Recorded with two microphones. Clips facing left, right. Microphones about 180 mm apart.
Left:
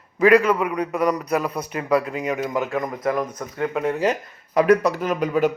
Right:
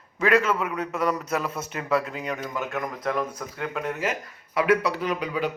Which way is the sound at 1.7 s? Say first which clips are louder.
Left 5 dB; centre (ahead or behind).